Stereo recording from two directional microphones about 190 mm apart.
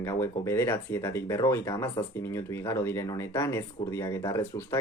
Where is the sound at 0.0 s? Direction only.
15° left (ahead or behind).